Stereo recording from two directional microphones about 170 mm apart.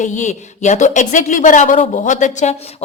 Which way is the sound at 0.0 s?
45° left (ahead or behind).